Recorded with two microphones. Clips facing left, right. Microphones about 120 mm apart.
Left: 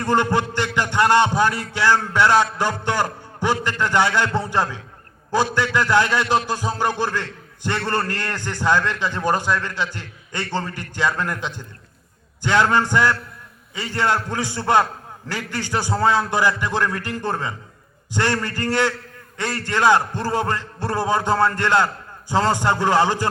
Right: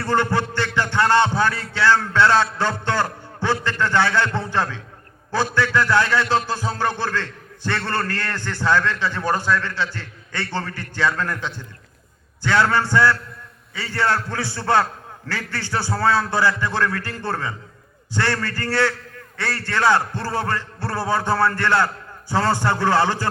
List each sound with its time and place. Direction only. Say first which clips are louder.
0.0 s a man's voice: left 1 dB; 15° left (ahead or behind)